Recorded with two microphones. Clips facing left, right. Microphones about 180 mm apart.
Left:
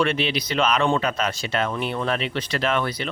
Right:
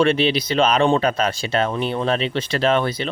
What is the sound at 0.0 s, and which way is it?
Speech, 30° right (ahead or behind).